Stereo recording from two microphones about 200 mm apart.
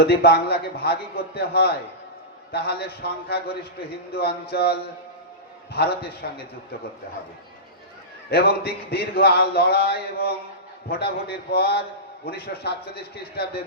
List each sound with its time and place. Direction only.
0.1 s a man's voice: 50° left (ahead or behind)
8.3 s a man's voice: 55° left (ahead or behind)